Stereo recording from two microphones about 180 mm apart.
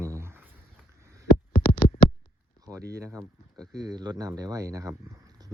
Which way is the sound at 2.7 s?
20° right (ahead or behind).